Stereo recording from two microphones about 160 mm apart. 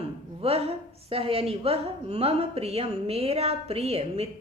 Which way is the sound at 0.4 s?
40° right (ahead or behind).